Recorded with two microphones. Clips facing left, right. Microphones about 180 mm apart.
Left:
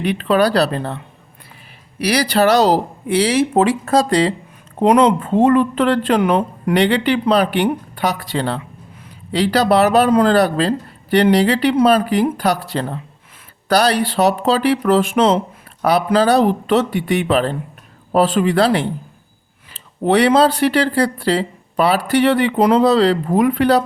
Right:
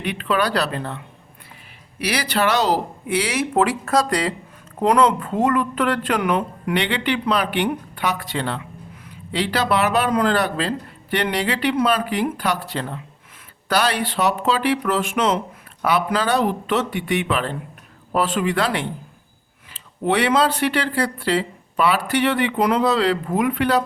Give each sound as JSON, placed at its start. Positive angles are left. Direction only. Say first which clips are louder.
{"t": 0.0, "sound": "speech", "louder": "left 6 dB", "side_deg": 35}